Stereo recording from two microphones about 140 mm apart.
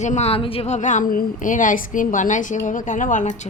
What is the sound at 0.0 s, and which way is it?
A woman's voice, 55° left (ahead or behind).